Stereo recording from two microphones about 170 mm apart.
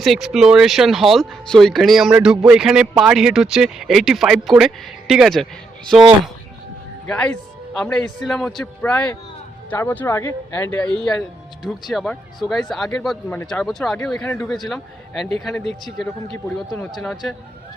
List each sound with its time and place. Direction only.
0.0 s speech: centre (ahead or behind)
7.1 s a man's voice: 5° left (ahead or behind)